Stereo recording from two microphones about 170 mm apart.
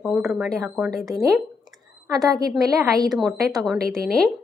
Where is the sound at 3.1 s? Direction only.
Centre (ahead or behind).